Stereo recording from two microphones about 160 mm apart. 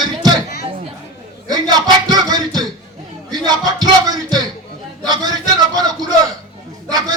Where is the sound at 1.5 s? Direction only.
25° right (ahead or behind).